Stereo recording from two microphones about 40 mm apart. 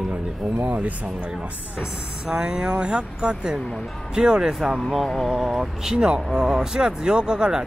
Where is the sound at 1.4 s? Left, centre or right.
Right.